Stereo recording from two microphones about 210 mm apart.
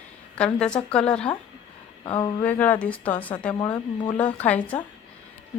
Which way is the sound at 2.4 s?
10° left (ahead or behind).